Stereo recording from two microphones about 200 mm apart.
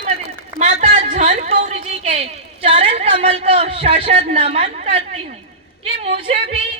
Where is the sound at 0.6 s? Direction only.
35° right (ahead or behind).